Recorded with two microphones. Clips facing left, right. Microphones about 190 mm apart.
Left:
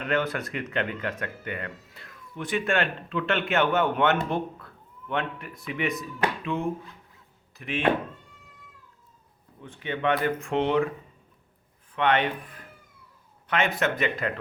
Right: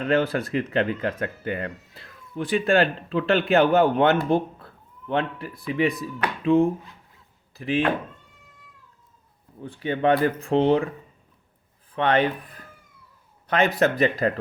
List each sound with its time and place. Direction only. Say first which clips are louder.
0.0 s speech: right 5 dB; 30° right (ahead or behind)
9.6 s speech: right 6 dB; 35° right (ahead or behind)
11.9 s speech: right 3 dB; 35° right (ahead or behind)